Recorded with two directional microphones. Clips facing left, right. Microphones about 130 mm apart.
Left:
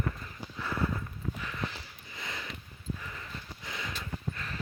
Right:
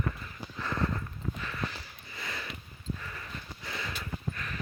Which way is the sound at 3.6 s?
15° left (ahead or behind).